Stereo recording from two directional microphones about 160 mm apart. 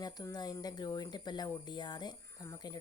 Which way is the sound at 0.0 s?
25° left (ahead or behind).